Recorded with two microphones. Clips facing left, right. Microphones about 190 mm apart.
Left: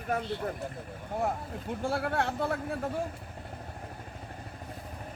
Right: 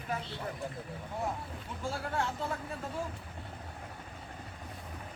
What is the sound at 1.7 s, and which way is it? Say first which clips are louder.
Speech: left 6 dB; 60° left (ahead or behind).